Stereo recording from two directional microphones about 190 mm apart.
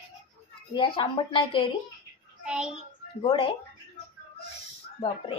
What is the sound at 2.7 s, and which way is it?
Speech, 30° left (ahead or behind).